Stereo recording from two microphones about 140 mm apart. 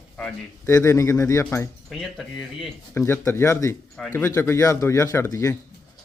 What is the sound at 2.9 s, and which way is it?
A man's voice, 20° left (ahead or behind).